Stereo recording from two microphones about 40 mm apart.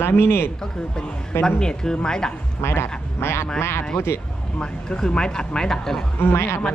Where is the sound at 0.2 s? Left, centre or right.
Left.